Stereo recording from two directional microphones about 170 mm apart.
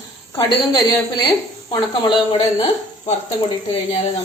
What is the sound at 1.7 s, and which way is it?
Speech, 30° left (ahead or behind).